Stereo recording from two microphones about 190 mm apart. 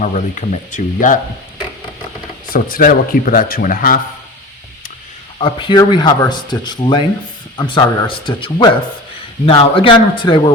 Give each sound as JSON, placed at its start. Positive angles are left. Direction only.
{"t": 0.0, "sound": "speech", "side_deg": 40}
{"t": 2.5, "sound": "speech", "side_deg": 50}
{"t": 5.4, "sound": "speech", "side_deg": 25}